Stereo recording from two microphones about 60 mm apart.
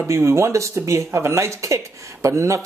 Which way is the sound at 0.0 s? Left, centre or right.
Right.